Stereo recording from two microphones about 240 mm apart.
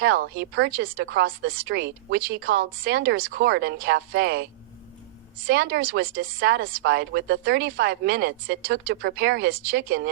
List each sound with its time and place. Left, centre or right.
0.0 s speech: right
5.5 s speech: right